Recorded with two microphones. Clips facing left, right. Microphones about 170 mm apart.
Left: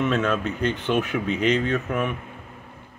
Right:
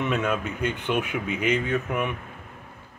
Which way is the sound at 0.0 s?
15° right (ahead or behind).